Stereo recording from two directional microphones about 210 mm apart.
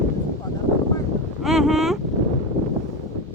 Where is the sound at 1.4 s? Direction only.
Centre (ahead or behind).